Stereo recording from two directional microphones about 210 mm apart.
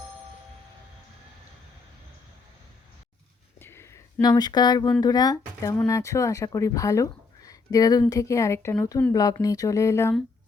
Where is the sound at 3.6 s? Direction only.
10° left (ahead or behind).